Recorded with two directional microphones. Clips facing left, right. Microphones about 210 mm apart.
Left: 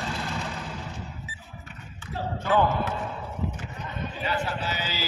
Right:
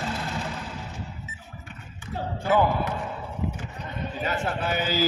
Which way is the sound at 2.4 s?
10° right (ahead or behind).